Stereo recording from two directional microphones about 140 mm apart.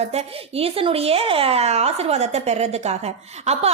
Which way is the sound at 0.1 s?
45° right (ahead or behind).